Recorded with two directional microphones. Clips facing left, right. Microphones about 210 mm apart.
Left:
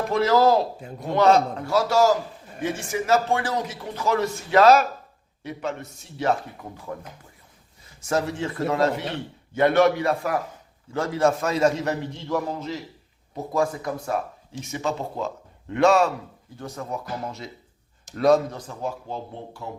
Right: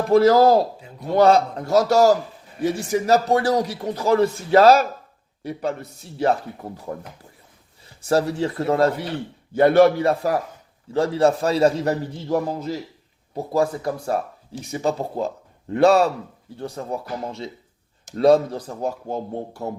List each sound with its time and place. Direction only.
0.1 s speech: 35° right (ahead or behind)
0.8 s speech: 50° left (ahead or behind)
1.1 s a man's voice: 35° right (ahead or behind)
8.0 s speech: 35° right (ahead or behind)